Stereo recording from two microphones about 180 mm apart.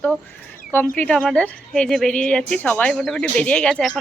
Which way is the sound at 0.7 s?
10° left (ahead or behind).